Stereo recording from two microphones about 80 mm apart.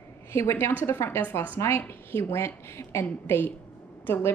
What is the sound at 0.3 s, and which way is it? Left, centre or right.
Speech, left.